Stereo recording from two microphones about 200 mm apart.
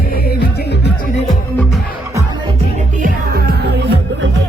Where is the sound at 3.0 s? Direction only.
50° right (ahead or behind).